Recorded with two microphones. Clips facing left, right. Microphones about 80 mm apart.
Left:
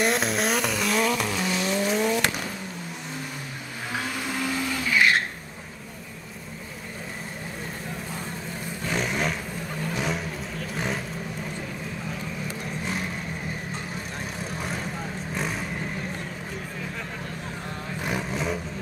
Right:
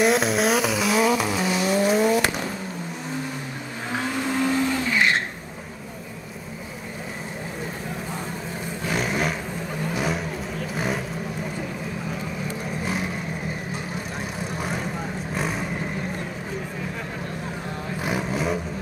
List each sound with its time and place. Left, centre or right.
0.0 s vehicle: centre
3.9 s vehicle: right
8.8 s a sound: centre
9.9 s vehicle: centre
14.6 s vehicle: centre
18.0 s vehicle: centre